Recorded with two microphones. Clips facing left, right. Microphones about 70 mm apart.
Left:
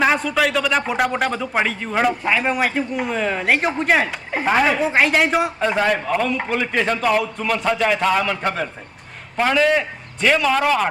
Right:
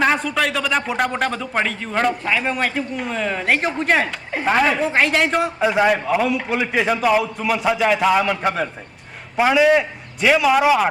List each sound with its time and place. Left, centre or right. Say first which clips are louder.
0.0 s a man's voice: left 1 dB; centre